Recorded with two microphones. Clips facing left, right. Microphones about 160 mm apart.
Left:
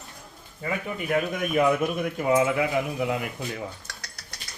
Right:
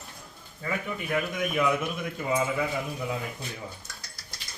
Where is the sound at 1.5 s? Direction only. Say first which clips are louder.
Left 6 dB; 55° left (ahead or behind).